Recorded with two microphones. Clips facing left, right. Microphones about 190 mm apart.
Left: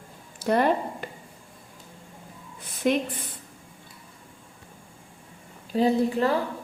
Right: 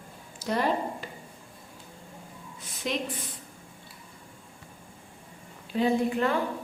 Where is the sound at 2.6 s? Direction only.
55° left (ahead or behind).